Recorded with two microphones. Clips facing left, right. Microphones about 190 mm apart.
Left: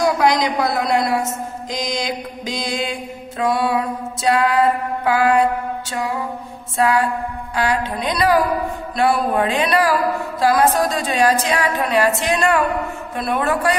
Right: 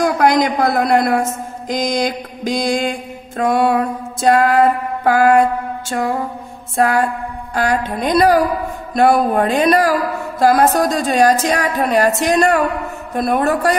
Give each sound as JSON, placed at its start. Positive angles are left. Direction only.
{"t": 0.0, "sound": "a sound", "side_deg": -50}
{"t": 1.8, "sound": "mantra", "side_deg": -50}
{"t": 13.1, "sound": "a man's voice", "side_deg": -40}